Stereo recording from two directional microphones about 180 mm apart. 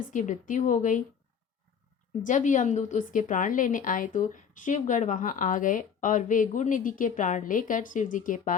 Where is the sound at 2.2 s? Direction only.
45° left (ahead or behind).